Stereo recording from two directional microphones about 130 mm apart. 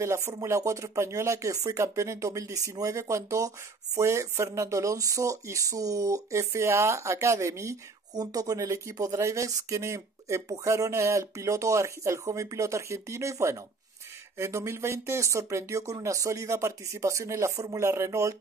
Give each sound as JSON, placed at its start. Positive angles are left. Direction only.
{"t": 0.0, "sound": "speech", "side_deg": -25}